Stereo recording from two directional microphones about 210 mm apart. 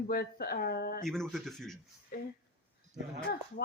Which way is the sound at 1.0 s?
Centre (ahead or behind).